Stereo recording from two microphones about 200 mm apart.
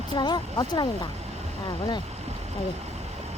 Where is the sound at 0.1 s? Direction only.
20° left (ahead or behind).